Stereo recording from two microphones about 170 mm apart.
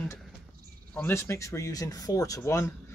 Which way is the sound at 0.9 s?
15° left (ahead or behind).